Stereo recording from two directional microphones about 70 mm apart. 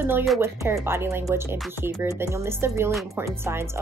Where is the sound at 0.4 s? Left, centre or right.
Right.